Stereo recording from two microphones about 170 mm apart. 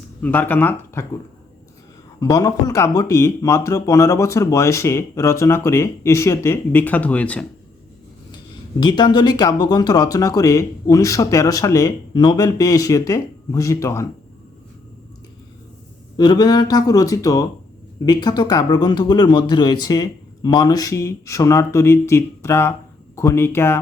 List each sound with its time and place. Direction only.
0.2 s speech: 10° left (ahead or behind)
2.2 s speech: 20° left (ahead or behind)
8.8 s speech: 25° left (ahead or behind)
16.1 s speech: 25° left (ahead or behind)